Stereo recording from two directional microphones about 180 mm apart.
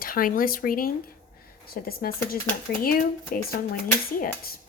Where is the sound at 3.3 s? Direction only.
50° left (ahead or behind).